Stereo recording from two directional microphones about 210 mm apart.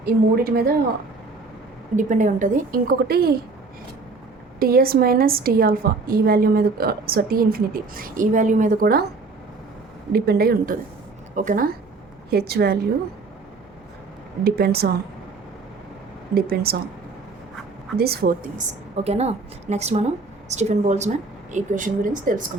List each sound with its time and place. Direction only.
0.0 s a woman's voice: 45° right (ahead or behind)
2.0 s a woman's voice: 35° right (ahead or behind)
4.6 s a woman's voice: 45° right (ahead or behind)
10.1 s a woman's voice: 50° right (ahead or behind)
14.4 s a woman's voice: 50° right (ahead or behind)
16.3 s a woman's voice: 45° right (ahead or behind)
17.9 s a woman's voice: 50° right (ahead or behind)